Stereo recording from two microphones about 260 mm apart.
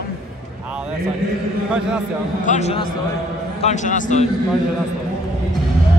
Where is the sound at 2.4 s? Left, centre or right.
Left.